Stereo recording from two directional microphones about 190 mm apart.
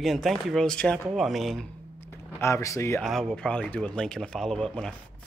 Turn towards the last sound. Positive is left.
turn(degrees=5)  # may be behind; listen again after turning